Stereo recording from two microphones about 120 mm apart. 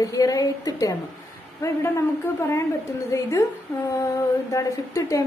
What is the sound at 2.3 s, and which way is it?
A woman's voice, 20° left (ahead or behind).